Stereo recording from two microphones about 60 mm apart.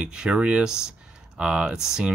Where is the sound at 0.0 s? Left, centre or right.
Centre.